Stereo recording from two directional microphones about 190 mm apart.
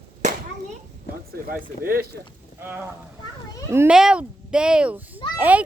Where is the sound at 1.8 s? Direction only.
50° right (ahead or behind).